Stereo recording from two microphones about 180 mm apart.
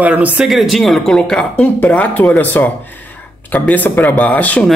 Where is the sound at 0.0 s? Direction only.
10° right (ahead or behind).